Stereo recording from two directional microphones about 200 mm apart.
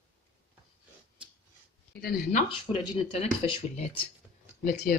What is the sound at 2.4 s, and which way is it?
Speech, 30° left (ahead or behind).